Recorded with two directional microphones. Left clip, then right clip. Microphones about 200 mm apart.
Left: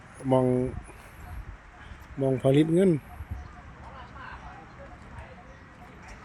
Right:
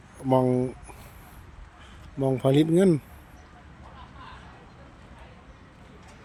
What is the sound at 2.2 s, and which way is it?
Speech, 15° right (ahead or behind).